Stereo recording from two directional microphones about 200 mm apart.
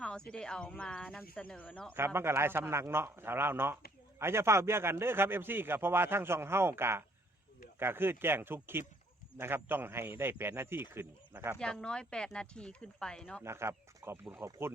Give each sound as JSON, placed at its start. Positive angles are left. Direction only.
{"t": 0.0, "sound": "speech", "side_deg": 5}
{"t": 1.9, "sound": "a man's voice", "side_deg": -10}
{"t": 11.6, "sound": "speech", "side_deg": 5}
{"t": 13.4, "sound": "a man's voice", "side_deg": -15}